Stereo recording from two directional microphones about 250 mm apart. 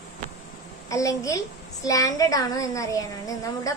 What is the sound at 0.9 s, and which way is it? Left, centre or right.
A child's voice, centre.